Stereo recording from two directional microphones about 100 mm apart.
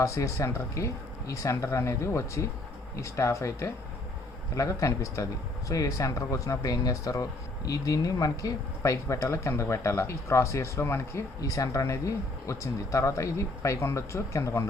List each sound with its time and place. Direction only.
0.0 s speech: 30° left (ahead or behind)